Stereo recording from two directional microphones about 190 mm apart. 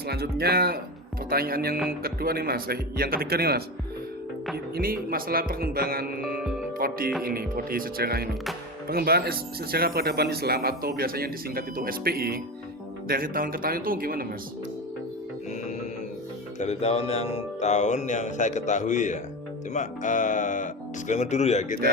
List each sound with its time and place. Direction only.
0.1 s speech: 55° right (ahead or behind)
16.6 s speech: 35° left (ahead or behind)